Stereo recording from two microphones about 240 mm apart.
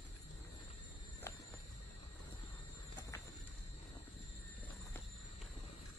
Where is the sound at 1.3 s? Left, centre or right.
Centre.